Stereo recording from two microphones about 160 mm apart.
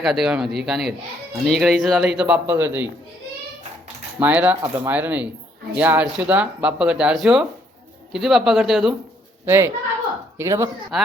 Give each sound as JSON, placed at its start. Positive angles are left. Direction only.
{"t": 0.0, "sound": "speech", "side_deg": -5}
{"t": 4.2, "sound": "speech", "side_deg": -10}
{"t": 9.5, "sound": "speech", "side_deg": -15}
{"t": 10.9, "sound": "speech", "side_deg": 0}